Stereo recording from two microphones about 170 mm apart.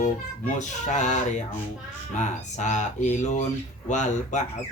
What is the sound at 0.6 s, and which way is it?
Speech, 45° left (ahead or behind).